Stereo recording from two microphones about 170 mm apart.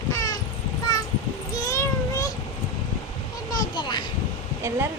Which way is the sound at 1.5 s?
20° left (ahead or behind).